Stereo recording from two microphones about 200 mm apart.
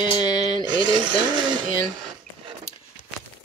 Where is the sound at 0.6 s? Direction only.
20° right (ahead or behind).